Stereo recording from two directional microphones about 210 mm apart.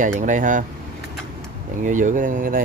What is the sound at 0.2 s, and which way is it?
Speech, 35° right (ahead or behind).